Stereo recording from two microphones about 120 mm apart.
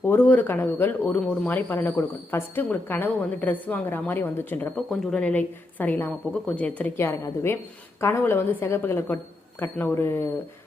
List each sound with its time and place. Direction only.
0.0 s a woman's voice: 20° left (ahead or behind)